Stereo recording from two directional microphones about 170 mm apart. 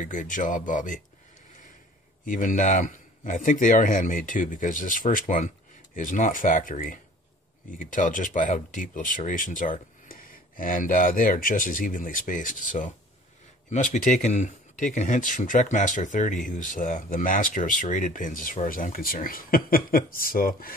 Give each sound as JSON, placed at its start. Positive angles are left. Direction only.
{"t": 0.0, "sound": "speech", "side_deg": 50}
{"t": 2.2, "sound": "speech", "side_deg": 50}